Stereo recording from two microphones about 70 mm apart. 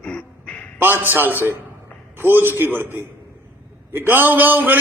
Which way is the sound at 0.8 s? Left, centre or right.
Right.